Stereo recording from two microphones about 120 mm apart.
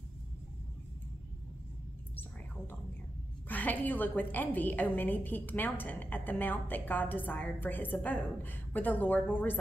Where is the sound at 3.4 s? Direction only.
15° left (ahead or behind).